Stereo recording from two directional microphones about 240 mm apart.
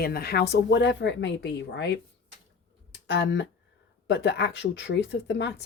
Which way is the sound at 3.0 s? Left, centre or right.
Left.